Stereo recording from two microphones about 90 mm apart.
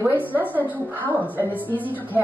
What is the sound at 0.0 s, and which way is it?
A woman's voice, 20° right (ahead or behind).